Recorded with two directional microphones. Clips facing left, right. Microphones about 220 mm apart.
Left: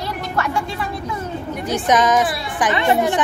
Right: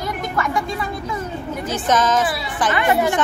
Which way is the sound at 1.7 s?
15° left (ahead or behind).